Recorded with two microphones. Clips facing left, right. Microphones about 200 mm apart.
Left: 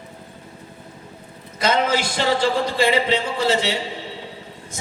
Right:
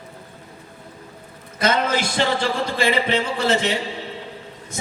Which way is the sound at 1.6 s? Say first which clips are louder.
Left 1 dB; 55° right (ahead or behind).